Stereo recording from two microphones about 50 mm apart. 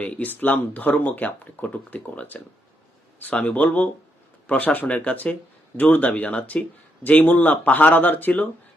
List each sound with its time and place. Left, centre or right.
0.0 s speech: left